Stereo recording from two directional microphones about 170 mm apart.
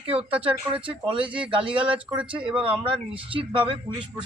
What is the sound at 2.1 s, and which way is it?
Speech, 10° right (ahead or behind).